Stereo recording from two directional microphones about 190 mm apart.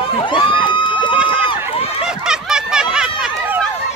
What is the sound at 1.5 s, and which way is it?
Run, 30° left (ahead or behind).